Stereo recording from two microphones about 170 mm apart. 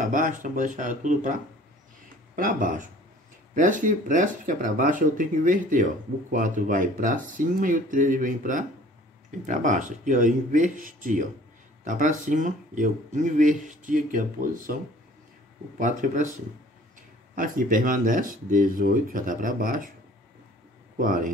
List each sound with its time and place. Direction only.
0.0 s speech: 50° right (ahead or behind)
15.8 s speech: 45° right (ahead or behind)
17.4 s speech: 55° right (ahead or behind)
21.0 s speech: 55° right (ahead or behind)